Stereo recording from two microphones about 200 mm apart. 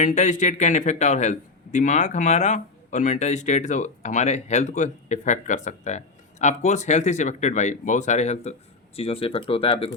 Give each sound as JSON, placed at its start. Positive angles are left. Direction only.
{"t": 0.0, "sound": "a man's voice", "side_deg": 35}